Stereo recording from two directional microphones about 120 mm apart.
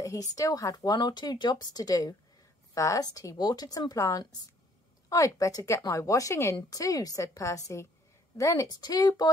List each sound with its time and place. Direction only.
0.0 s a woman's voice: 30° left (ahead or behind)